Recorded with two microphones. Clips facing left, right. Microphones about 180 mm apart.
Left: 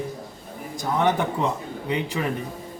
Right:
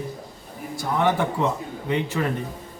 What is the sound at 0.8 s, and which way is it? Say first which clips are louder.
Speech: even; 20° left (ahead or behind).